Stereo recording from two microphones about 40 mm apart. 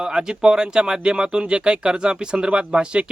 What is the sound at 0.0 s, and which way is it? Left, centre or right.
Speech, centre.